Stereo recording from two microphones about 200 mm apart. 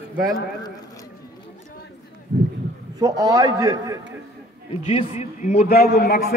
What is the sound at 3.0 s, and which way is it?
A man's voice, 15° right (ahead or behind).